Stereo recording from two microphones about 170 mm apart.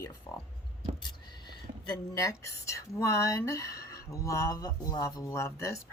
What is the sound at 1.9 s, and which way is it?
A woman's voice, 20° left (ahead or behind).